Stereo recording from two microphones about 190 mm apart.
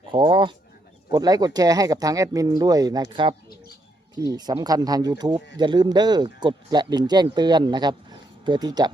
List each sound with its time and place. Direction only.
0.1 s speech: 25° right (ahead or behind)